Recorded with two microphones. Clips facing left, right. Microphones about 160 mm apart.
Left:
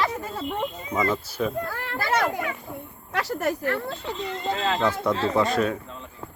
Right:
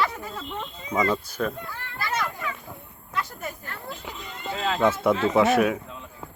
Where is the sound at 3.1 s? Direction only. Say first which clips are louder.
Left 7 dB; 90° left; by 4.0 s 70° left (ahead or behind).